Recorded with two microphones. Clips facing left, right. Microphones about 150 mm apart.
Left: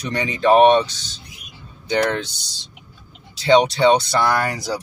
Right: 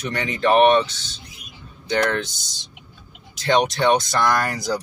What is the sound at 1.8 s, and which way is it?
Speech, 15° left (ahead or behind).